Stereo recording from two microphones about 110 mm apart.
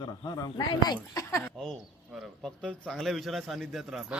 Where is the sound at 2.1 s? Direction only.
5° left (ahead or behind).